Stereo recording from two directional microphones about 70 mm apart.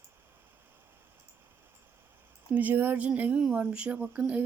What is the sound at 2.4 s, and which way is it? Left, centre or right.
Speech, right.